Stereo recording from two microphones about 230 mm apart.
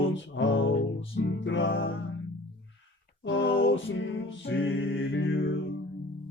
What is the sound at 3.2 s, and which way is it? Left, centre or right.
Music, left.